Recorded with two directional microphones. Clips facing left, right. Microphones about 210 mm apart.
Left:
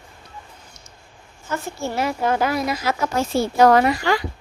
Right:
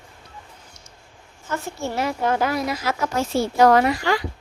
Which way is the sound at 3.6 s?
45° left (ahead or behind).